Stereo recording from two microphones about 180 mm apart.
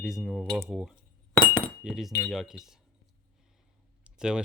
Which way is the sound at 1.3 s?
10° left (ahead or behind).